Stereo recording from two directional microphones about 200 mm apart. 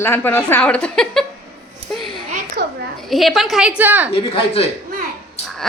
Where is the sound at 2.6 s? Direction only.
55° right (ahead or behind).